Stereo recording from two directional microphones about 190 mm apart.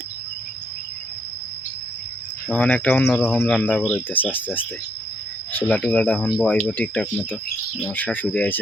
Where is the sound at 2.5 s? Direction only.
5° left (ahead or behind).